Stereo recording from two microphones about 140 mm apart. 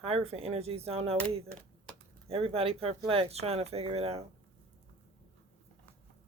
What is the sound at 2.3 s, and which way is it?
Speech, 45° right (ahead or behind).